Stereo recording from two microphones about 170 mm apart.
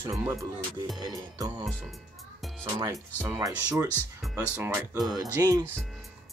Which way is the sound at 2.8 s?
15° right (ahead or behind).